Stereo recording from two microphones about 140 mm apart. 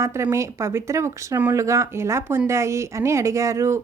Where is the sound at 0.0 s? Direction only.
20° right (ahead or behind).